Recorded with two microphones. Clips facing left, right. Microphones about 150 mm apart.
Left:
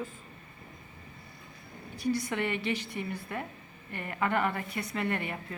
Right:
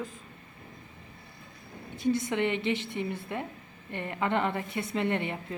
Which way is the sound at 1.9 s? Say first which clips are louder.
Right 3 dB; 20° right (ahead or behind).